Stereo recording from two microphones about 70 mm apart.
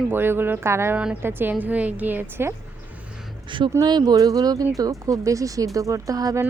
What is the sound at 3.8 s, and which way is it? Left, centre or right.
A woman's voice, right.